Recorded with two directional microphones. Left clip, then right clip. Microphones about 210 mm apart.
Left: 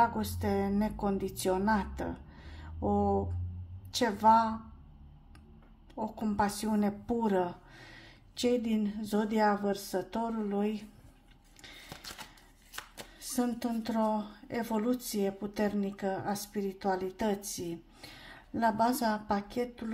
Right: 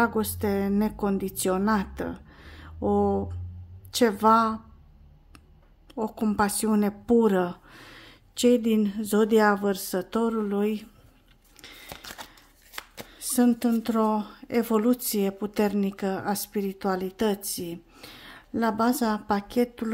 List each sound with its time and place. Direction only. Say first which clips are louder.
0.0 s a woman's voice: right 4 dB; 30° right (ahead or behind)
5.9 s speech: right 6 dB; 35° right (ahead or behind)
11.6 s a sound: right 4 dB; 30° right (ahead or behind)
12.9 s speech: right 8 dB; 35° right (ahead or behind)